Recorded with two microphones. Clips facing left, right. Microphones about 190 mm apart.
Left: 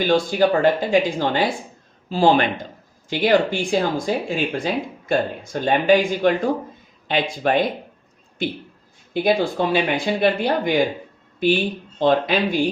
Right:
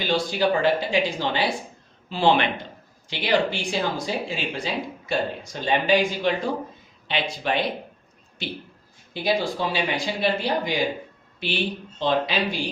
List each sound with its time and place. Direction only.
0.0 s speech: 50° left (ahead or behind)
9.1 s speech: 55° left (ahead or behind)